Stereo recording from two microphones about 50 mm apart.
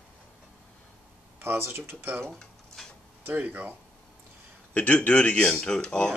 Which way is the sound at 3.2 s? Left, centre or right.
Right.